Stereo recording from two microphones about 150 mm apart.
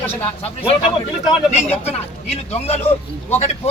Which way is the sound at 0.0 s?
15° left (ahead or behind).